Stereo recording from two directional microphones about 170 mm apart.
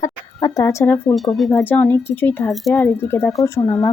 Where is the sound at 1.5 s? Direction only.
10° left (ahead or behind).